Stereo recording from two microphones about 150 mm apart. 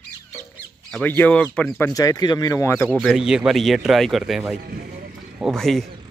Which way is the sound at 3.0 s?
Centre (ahead or behind).